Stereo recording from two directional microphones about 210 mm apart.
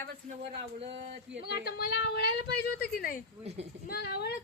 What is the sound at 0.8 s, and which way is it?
Speech, 25° right (ahead or behind).